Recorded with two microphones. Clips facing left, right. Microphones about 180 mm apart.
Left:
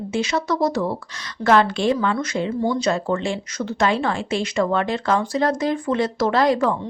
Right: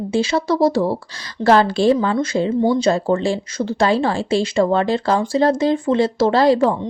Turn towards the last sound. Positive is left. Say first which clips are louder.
# right 4 dB
turn(degrees=-30)  # may be behind; listen again after turning